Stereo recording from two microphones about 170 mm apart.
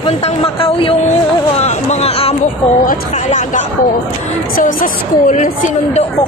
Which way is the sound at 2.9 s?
45° left (ahead or behind).